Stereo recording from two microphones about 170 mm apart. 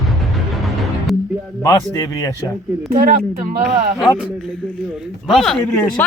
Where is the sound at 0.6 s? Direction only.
Centre (ahead or behind).